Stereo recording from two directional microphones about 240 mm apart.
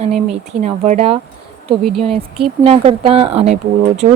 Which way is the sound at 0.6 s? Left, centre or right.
Right.